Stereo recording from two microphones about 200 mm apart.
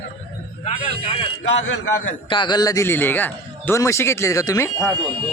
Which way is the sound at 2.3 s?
25° left (ahead or behind).